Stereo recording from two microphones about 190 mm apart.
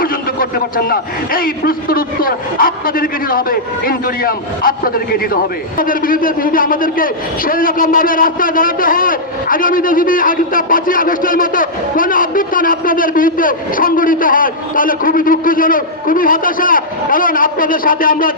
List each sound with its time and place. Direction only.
0.0 s a man's voice: 50° left (ahead or behind)